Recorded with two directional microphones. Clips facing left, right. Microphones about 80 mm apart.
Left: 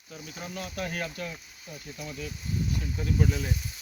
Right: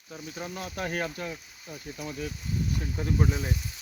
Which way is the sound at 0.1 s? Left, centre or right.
Right.